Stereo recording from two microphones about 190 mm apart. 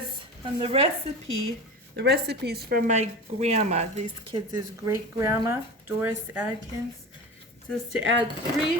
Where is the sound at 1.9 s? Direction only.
60° right (ahead or behind).